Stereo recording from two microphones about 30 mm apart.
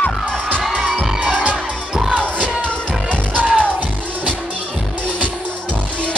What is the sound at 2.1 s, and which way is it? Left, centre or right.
Music, left.